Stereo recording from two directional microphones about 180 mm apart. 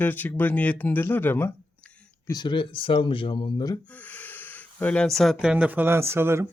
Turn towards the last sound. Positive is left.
turn(degrees=-15)  # may be behind; listen again after turning